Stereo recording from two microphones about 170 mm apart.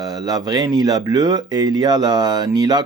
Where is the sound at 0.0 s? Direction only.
20° right (ahead or behind).